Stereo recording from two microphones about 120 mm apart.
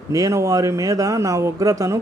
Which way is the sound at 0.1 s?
25° right (ahead or behind).